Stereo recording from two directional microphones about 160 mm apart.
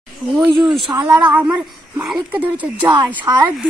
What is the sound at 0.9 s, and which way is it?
A woman's voice, 10° right (ahead or behind).